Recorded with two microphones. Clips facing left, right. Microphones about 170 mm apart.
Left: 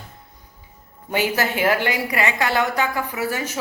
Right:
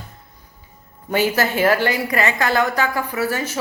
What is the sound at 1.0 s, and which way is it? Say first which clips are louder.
A woman's voice: right 3 dB; 15° left (ahead or behind).